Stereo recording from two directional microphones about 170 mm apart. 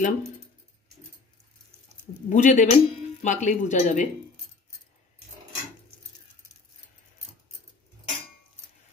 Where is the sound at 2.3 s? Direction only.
45° left (ahead or behind).